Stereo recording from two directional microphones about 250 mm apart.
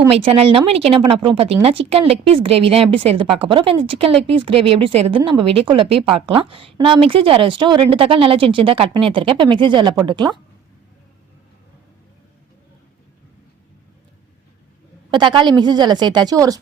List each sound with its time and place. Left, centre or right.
0.3 s a woman's voice: right
15.1 s a woman's voice: centre